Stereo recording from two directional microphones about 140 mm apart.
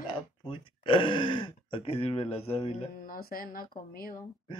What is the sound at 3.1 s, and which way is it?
Speech, 90° left.